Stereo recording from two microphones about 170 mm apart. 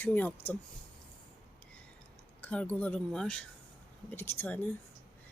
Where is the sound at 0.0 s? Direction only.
10° left (ahead or behind).